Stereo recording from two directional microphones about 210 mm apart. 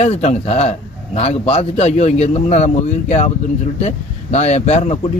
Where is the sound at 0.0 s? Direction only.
30° left (ahead or behind).